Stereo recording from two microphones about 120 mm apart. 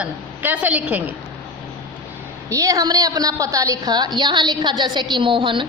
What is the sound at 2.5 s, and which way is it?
A woman's voice, 30° right (ahead or behind).